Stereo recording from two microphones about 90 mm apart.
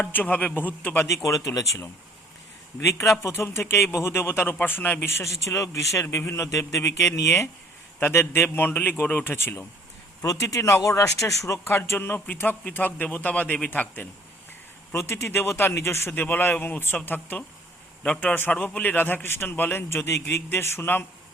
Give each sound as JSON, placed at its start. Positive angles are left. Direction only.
{"t": 0.0, "sound": "a man's voice", "side_deg": 20}
{"t": 1.0, "sound": "a man's voice", "side_deg": 35}
{"t": 10.2, "sound": "a man's voice", "side_deg": 35}
{"t": 18.0, "sound": "a man's voice", "side_deg": 10}